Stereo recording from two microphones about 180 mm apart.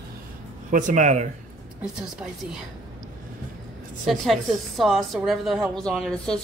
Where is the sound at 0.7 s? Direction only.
45° right (ahead or behind).